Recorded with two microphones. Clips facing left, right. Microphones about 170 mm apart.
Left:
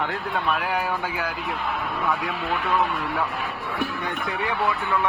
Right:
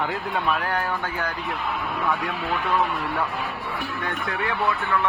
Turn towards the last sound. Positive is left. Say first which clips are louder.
# even
turn(degrees=0)  # may be behind; listen again after turning